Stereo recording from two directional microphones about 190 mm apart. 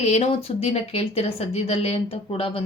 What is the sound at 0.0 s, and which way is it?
A woman's voice, 35° left (ahead or behind).